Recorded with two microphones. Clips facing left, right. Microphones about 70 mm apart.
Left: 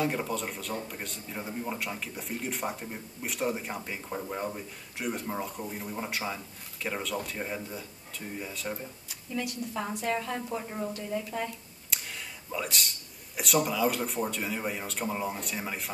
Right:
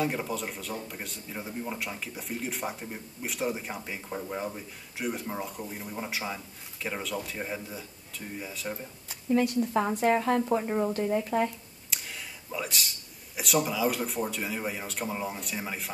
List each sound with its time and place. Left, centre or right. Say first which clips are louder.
0.0 s speech: even; centre
9.3 s a woman's voice: right 9 dB; right
11.9 s a sound: even; centre
13.4 s speech: even; centre